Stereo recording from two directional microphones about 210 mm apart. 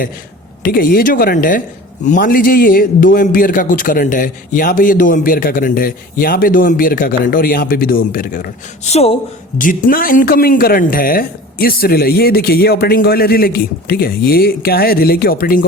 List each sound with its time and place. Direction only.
0.6 s a man's voice: 45° left (ahead or behind)